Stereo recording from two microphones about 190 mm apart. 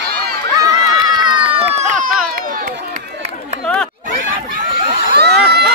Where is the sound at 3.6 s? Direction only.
5° left (ahead or behind).